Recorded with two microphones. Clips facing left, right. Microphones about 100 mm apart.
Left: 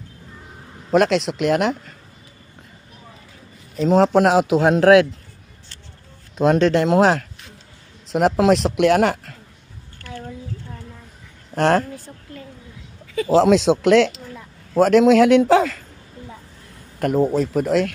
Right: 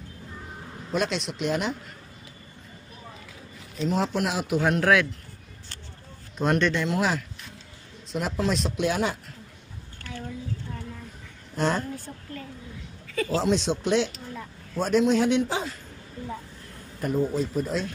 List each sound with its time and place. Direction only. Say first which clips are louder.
0.9 s speech: left 11 dB; 85° left
3.8 s speech: left 11 dB; 75° left (ahead or behind)
6.3 s speech: left 8 dB; 90° left
11.5 s a woman's voice: left 9 dB; 75° left (ahead or behind)
13.0 s a sound: left 5 dB; 15° left (ahead or behind)
13.3 s a man's voice: left 11 dB; 90° left
17.0 s speech: left 7 dB; 75° left (ahead or behind)